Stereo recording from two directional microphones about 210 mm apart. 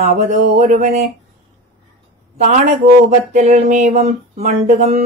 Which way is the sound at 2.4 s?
35° right (ahead or behind).